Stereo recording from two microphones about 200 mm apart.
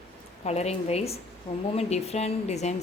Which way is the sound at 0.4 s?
35° left (ahead or behind).